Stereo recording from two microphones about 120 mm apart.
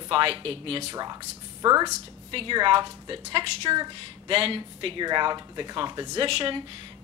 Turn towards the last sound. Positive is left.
turn(degrees=-45)  # may be behind; listen again after turning